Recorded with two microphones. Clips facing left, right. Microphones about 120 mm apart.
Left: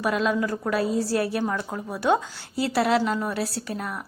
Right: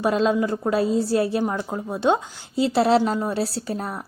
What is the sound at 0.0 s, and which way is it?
A woman's voice, 30° right (ahead or behind).